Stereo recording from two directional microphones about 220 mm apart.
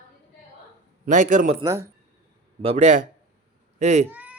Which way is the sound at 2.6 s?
30° right (ahead or behind).